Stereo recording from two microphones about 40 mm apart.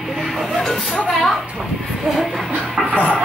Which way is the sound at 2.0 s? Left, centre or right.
Centre.